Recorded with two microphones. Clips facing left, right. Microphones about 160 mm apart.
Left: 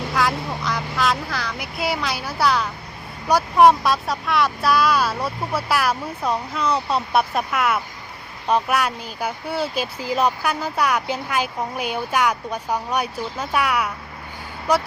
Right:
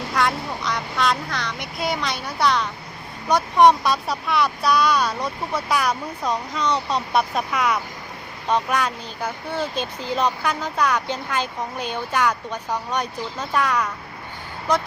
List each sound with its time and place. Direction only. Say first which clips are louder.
0.1 s speech: even; centre (ahead or behind)